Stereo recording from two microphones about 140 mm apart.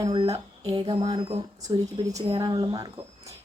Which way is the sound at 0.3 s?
35° right (ahead or behind).